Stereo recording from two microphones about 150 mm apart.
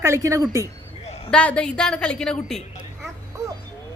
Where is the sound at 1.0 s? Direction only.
45° left (ahead or behind).